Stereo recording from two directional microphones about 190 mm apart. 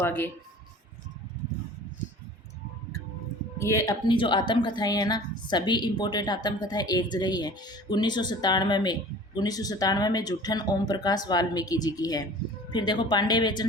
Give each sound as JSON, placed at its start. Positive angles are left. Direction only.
{"t": 0.0, "sound": "speech", "side_deg": 10}
{"t": 3.6, "sound": "speech", "side_deg": 15}